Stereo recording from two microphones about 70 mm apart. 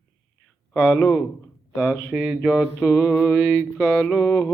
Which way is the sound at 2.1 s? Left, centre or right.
Centre.